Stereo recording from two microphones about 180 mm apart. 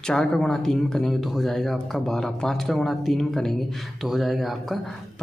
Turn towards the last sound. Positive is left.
turn(degrees=0)  # may be behind; listen again after turning